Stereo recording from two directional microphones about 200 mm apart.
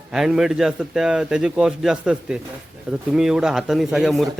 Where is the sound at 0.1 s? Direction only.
Centre (ahead or behind).